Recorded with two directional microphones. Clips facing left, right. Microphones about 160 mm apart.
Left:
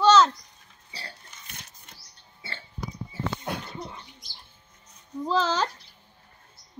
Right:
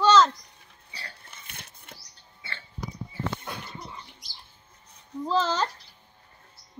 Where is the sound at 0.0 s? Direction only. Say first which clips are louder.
Left 1 dB; 10° left (ahead or behind).